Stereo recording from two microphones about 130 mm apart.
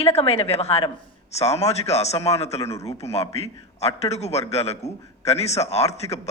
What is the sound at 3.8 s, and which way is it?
A man's voice, 55° left (ahead or behind).